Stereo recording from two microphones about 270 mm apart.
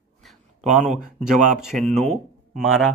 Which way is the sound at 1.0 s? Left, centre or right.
Centre.